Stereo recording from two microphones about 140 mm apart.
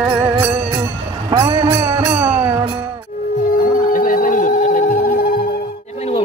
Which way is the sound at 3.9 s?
80° left.